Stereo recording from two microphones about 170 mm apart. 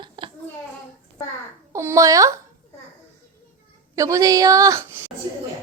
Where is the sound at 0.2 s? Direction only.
30° right (ahead or behind).